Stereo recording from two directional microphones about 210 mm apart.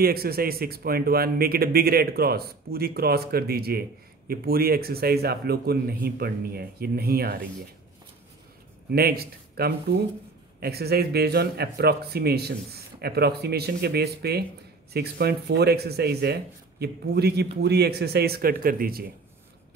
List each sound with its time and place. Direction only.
0.0 s speech: 45° right (ahead or behind)
8.9 s speech: 45° right (ahead or behind)